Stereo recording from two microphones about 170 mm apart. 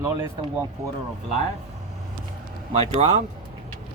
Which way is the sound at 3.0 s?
35° right (ahead or behind).